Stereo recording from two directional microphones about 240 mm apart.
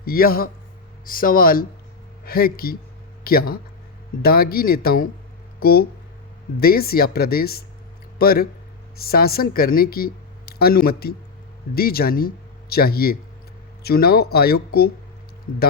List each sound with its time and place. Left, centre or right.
0.0 s a woman's voice: left